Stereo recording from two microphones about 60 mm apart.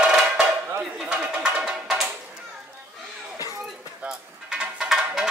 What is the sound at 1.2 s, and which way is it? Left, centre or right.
Music, right.